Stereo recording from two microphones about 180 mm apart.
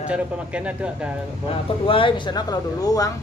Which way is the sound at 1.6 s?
30° left (ahead or behind).